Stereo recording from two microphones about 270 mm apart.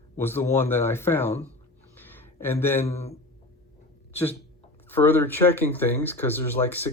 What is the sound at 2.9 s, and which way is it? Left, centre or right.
Speech, left.